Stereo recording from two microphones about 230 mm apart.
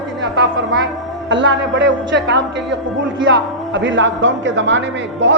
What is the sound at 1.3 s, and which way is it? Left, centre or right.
Speech, right.